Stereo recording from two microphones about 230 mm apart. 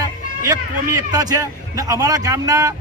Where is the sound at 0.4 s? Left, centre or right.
Centre.